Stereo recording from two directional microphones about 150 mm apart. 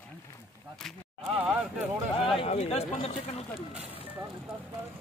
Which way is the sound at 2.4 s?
40° left (ahead or behind).